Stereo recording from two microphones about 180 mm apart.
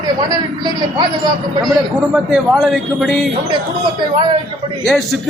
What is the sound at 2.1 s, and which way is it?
A man's voice, 5° right (ahead or behind).